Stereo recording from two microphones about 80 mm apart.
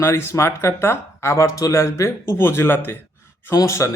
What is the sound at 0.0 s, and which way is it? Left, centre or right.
A man's voice, left.